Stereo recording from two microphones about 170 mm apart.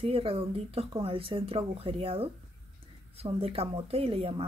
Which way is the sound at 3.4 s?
35° right (ahead or behind).